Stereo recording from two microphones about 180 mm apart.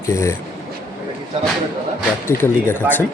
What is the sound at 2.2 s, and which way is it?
Speech, 10° left (ahead or behind).